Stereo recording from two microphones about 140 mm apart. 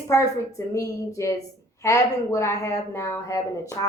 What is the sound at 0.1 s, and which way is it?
Speech, 25° left (ahead or behind).